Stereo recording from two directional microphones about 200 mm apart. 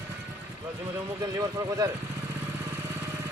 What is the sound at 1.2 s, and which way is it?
Speech, 15° right (ahead or behind).